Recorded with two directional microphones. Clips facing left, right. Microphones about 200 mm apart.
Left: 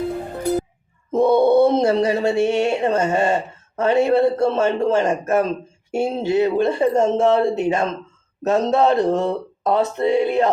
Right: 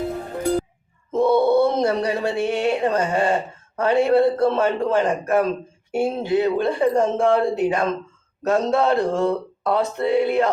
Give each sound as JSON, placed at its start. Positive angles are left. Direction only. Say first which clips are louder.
{"t": 1.2, "sound": "speech", "louder": "left 3 dB", "side_deg": 15}